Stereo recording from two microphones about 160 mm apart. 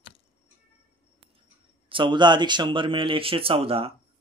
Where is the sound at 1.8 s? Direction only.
30° right (ahead or behind).